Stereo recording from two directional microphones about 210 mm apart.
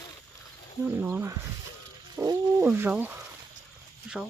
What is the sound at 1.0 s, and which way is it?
Speech, 10° right (ahead or behind).